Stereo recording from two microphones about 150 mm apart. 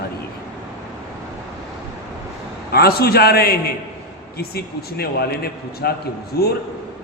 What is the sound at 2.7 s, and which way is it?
A man's voice, 90° left.